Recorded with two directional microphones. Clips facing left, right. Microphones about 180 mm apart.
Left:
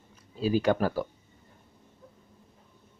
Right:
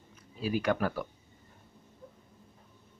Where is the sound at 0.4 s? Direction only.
30° left (ahead or behind).